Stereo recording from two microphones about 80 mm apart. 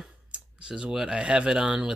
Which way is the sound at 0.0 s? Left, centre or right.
Centre.